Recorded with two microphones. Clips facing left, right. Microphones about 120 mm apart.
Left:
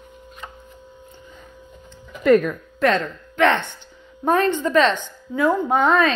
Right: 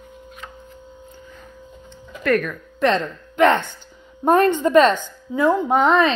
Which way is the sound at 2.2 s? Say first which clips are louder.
Left 5 dB; 20° left (ahead or behind).